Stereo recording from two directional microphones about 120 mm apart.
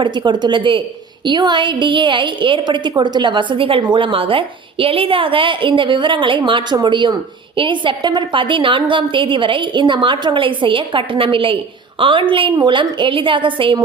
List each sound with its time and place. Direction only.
0.0 s a woman's voice: 40° right (ahead or behind)